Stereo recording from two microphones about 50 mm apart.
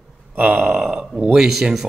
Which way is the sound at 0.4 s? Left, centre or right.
Right.